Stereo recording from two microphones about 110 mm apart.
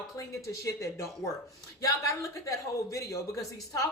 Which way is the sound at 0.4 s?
30° left (ahead or behind).